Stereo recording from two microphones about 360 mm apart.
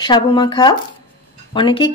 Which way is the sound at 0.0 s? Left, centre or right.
Centre.